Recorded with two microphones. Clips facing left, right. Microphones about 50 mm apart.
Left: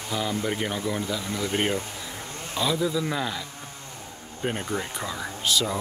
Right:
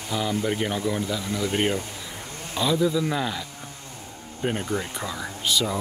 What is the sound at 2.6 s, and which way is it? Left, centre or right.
Speech, centre.